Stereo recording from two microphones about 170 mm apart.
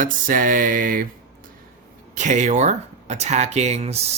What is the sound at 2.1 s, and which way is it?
Speech, 45° right (ahead or behind).